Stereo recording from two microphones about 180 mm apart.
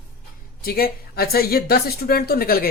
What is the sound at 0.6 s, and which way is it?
Speech, 55° left (ahead or behind).